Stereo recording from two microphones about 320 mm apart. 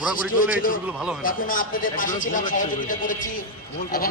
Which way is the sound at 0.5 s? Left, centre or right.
Left.